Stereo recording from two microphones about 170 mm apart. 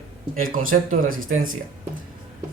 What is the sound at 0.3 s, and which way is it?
Speech, 55° right (ahead or behind).